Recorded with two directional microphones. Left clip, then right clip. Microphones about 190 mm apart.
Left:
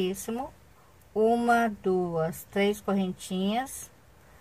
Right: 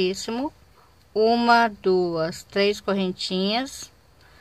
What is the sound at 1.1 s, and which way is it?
Speech, 30° right (ahead or behind).